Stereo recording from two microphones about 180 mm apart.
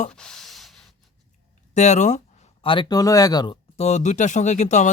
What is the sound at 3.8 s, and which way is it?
Speech, 40° left (ahead or behind).